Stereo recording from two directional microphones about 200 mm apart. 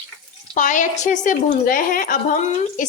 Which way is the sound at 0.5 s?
40° left (ahead or behind).